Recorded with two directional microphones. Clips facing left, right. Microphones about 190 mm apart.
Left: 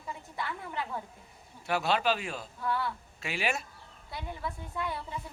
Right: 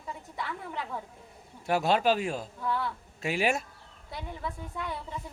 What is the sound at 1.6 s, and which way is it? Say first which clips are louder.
Speech: right 3 dB; 45° right (ahead or behind).